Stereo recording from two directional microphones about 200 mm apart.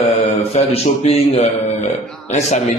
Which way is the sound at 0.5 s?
35° left (ahead or behind).